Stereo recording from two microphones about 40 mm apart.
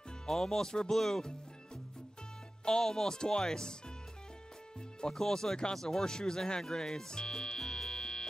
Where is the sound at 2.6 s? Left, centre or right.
Centre.